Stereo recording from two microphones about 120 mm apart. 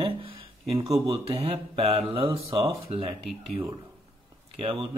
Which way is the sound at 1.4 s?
50° right (ahead or behind).